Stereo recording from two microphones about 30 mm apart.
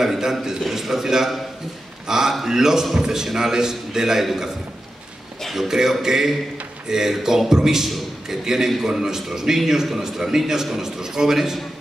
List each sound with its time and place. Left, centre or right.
0.0 s a man's voice: centre
5.5 s a man's voice: centre